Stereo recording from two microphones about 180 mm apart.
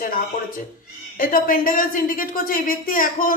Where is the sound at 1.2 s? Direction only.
50° left (ahead or behind).